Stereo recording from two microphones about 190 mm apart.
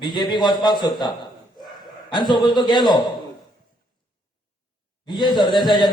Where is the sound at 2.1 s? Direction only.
25° left (ahead or behind).